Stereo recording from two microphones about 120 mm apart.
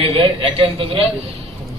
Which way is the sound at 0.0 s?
50° right (ahead or behind).